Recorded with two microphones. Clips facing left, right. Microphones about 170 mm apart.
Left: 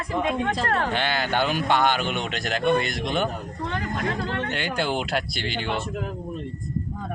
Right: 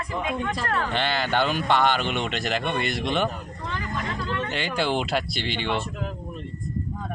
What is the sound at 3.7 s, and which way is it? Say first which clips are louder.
Speech: left 3 dB; 60° left (ahead or behind).